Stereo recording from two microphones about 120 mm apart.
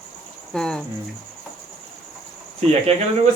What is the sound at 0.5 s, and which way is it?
Speech, 5° left (ahead or behind).